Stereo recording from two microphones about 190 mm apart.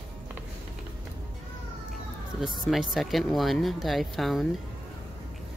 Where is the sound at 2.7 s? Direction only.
Centre (ahead or behind).